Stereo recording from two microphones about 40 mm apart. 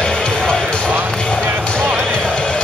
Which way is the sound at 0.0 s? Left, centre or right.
Left.